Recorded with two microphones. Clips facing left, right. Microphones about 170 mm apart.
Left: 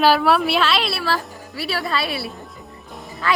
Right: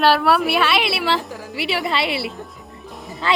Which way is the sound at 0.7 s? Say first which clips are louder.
Right 2 dB; 15° right (ahead or behind).